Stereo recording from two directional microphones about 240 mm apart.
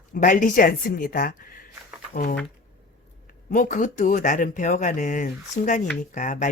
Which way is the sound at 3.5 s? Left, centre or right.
Left.